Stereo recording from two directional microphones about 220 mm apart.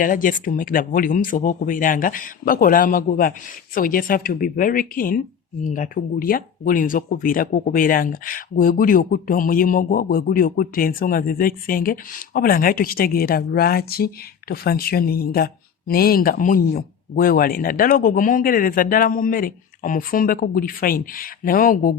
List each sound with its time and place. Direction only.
0.0 s speech: 40° left (ahead or behind)